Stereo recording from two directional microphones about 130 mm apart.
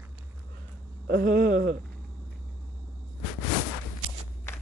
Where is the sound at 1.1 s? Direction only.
90° right.